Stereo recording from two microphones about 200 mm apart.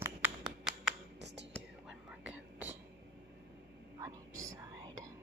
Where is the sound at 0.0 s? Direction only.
5° right (ahead or behind).